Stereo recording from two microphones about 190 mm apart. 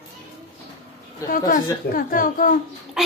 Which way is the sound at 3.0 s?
Centre (ahead or behind).